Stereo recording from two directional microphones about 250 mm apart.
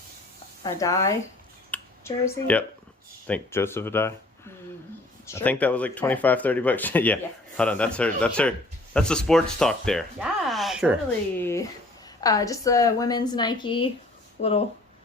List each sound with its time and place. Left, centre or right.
0.6 s a woman's voice: centre
1.7 s a sound: centre
3.2 s a woman's voice: centre
5.2 s speech: centre
11.3 s a woman's voice: centre; by 14.5 s left